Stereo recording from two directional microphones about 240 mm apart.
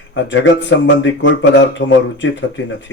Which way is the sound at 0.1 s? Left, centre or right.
Left.